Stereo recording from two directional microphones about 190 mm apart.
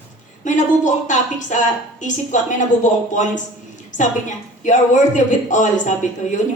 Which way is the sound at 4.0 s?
40° left (ahead or behind).